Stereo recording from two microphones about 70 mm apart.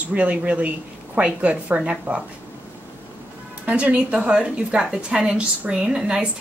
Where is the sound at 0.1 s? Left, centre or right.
Centre.